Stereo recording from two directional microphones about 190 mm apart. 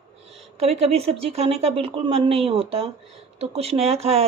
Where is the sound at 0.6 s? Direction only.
30° right (ahead or behind).